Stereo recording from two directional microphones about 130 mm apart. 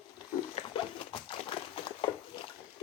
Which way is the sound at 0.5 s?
40° left (ahead or behind).